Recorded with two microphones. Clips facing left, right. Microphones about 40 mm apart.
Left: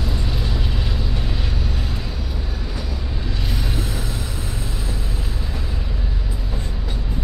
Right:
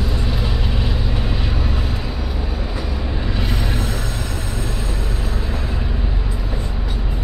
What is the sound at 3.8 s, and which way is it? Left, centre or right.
Vehicle, centre.